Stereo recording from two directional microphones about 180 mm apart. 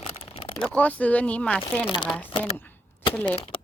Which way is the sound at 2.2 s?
30° left (ahead or behind).